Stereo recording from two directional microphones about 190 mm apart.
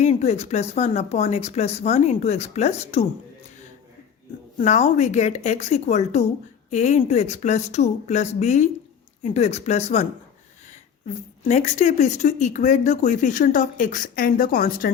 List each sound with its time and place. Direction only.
0.0 s speech: 35° left (ahead or behind)
4.6 s speech: 40° left (ahead or behind)
11.4 s speech: 35° left (ahead or behind)